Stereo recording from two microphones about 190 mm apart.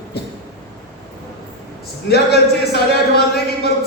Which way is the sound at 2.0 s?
60° left (ahead or behind).